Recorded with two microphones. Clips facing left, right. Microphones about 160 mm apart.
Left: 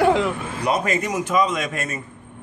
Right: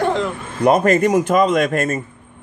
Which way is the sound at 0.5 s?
50° right (ahead or behind).